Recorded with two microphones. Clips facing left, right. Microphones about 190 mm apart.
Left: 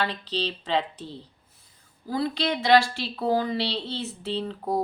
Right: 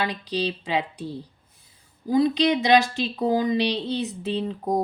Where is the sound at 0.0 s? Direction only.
15° right (ahead or behind).